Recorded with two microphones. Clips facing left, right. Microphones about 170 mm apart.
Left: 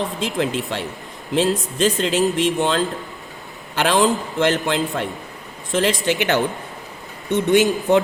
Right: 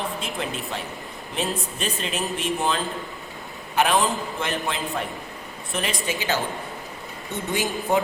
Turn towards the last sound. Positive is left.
turn(degrees=90)